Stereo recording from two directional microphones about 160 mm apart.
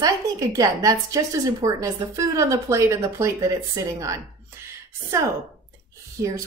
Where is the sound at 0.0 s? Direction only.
20° right (ahead or behind).